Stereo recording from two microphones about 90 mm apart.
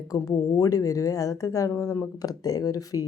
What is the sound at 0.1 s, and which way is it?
Speech, 40° left (ahead or behind).